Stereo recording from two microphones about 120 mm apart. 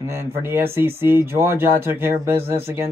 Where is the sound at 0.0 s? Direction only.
20° right (ahead or behind).